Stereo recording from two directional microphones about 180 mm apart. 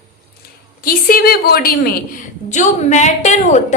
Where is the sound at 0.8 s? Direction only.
55° left (ahead or behind).